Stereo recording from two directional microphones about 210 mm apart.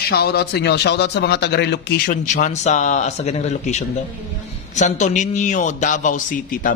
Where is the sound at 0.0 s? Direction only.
50° left (ahead or behind).